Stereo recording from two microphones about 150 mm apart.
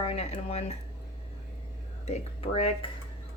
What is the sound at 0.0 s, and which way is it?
Speech, 40° left (ahead or behind).